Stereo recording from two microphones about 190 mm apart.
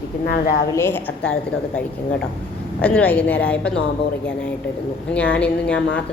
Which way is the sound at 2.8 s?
5° left (ahead or behind).